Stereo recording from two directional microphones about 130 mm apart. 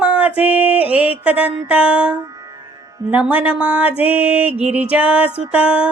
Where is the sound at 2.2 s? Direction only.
30° right (ahead or behind).